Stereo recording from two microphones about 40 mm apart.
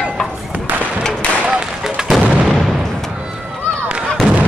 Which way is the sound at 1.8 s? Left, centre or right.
Centre.